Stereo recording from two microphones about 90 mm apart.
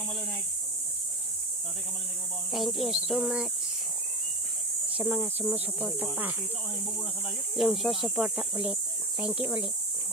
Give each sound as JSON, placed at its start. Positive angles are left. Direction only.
{"t": 2.5, "sound": "speech", "side_deg": 0}
{"t": 4.9, "sound": "speech", "side_deg": -15}
{"t": 7.5, "sound": "speech", "side_deg": 0}